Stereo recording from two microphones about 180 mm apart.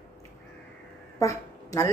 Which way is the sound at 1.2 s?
15° left (ahead or behind).